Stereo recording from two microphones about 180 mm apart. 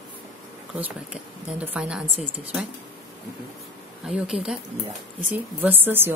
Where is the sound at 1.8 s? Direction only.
5° right (ahead or behind).